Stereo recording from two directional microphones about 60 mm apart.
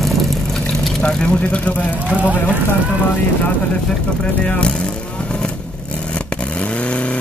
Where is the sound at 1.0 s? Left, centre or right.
Centre.